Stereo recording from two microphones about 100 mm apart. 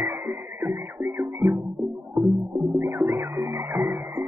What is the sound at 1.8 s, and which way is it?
Music, centre (ahead or behind).